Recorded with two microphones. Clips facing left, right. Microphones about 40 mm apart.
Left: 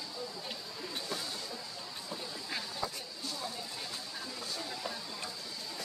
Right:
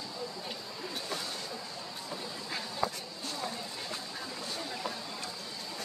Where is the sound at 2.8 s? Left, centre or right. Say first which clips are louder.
Right 8 dB; right.